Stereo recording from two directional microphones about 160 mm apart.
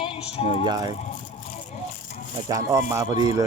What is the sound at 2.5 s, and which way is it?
Speech, 20° right (ahead or behind).